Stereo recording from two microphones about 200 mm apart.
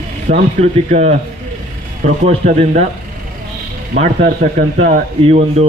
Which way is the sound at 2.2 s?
35° right (ahead or behind).